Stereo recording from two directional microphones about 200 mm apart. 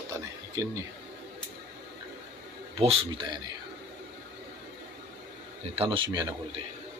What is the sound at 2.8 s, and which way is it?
Speech, 30° right (ahead or behind).